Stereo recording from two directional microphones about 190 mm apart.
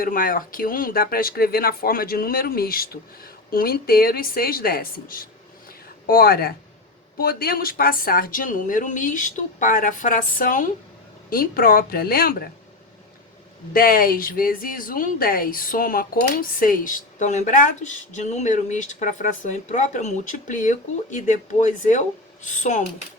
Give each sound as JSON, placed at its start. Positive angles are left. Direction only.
{"t": 0.0, "sound": "speech", "side_deg": 45}
{"t": 13.7, "sound": "speech", "side_deg": 50}